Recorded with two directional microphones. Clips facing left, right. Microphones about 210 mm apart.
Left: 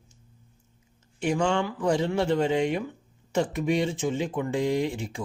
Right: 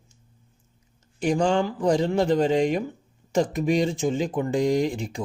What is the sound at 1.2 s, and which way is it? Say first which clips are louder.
Speech: right 3 dB; 35° right (ahead or behind).